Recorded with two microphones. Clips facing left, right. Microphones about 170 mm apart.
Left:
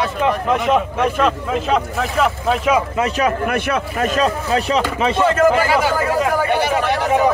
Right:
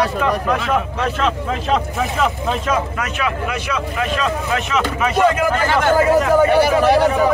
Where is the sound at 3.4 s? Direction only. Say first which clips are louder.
Left 3 dB; 55° left (ahead or behind); by 4.8 s 35° left (ahead or behind).